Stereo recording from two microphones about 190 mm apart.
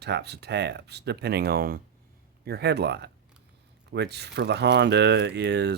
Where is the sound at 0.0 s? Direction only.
60° right (ahead or behind).